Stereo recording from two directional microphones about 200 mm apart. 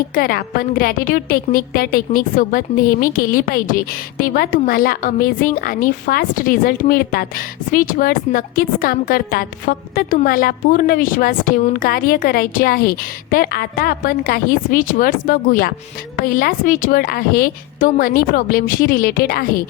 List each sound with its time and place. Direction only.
0.1 s a woman's voice: 50° left (ahead or behind)